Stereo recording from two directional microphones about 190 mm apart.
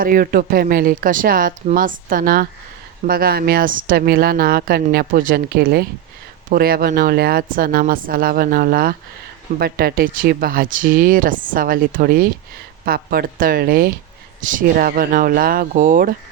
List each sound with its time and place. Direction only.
0.0 s speech: 50° right (ahead or behind)